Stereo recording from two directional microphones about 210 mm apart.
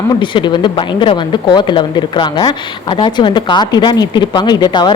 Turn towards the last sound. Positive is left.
turn(degrees=20)  # may be behind; listen again after turning